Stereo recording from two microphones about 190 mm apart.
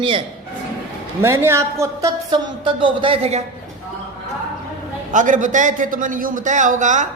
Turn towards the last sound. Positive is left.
turn(degrees=-40)  # may be behind; listen again after turning